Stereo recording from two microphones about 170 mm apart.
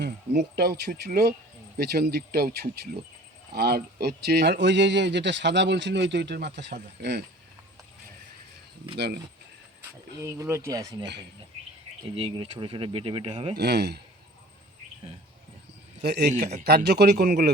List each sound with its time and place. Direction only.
0.0 s speech: 70° right (ahead or behind); by 7.2 s 90° right
9.0 s speech: 85° right
10.2 s speech: 15° right (ahead or behind)
12.1 s speech: 35° right (ahead or behind)
13.6 s speech: 75° right (ahead or behind)
16.0 s speech: 75° right (ahead or behind)